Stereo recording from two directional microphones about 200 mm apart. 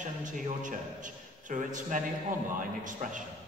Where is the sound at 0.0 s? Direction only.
40° right (ahead or behind).